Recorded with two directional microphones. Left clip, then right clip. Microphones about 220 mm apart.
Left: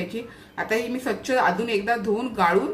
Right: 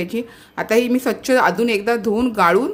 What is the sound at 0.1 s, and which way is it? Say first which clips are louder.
A woman's voice: right 7 dB; 50° right (ahead or behind).